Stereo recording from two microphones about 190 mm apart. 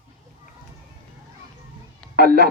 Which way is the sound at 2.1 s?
55° right (ahead or behind).